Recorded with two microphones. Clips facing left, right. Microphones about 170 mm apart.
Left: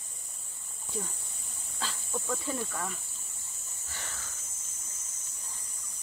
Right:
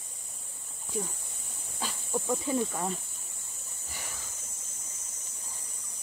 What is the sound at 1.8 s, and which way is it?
Speech, 15° right (ahead or behind).